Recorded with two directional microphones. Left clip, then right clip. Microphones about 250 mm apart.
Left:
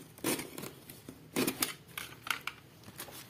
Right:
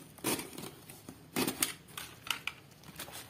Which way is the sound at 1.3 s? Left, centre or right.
Centre.